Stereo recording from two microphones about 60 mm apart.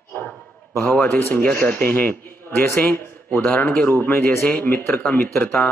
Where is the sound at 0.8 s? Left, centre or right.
Left.